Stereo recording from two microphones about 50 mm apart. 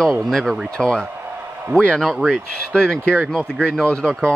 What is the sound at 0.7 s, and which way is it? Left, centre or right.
Speech, centre.